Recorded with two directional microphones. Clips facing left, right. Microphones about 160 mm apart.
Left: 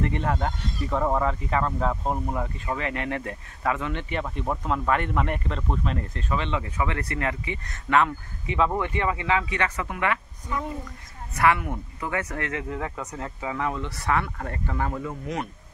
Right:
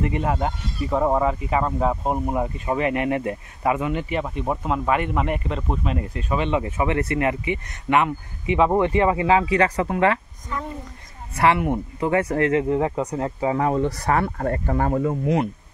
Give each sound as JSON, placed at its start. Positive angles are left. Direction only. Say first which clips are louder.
{"t": 0.0, "sound": "speech", "louder": "right 3 dB", "side_deg": -10}
{"t": 8.6, "sound": "speech", "louder": "right 9 dB", "side_deg": -25}
{"t": 10.5, "sound": "speech", "louder": "even", "side_deg": 10}
{"t": 11.3, "sound": "speech", "louder": "right 4 dB", "side_deg": -25}